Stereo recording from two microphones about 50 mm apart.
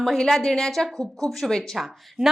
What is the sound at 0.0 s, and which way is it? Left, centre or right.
A woman's voice, centre.